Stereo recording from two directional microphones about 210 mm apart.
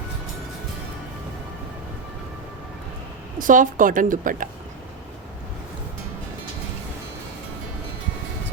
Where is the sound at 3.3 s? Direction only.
40° right (ahead or behind).